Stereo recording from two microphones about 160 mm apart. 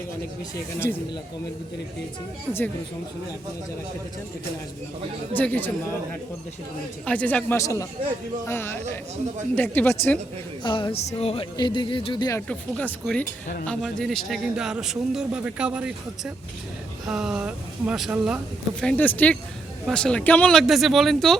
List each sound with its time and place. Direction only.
5.3 s speech: 10° left (ahead or behind)
7.0 s speech: 10° left (ahead or behind)
10.6 s speech: 30° left (ahead or behind)
11.5 s speech: 30° left (ahead or behind)
12.5 s a man's voice: 5° left (ahead or behind)
18.8 s a man's voice: 10° left (ahead or behind)